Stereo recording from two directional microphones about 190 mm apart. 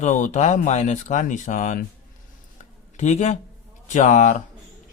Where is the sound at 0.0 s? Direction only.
40° left (ahead or behind).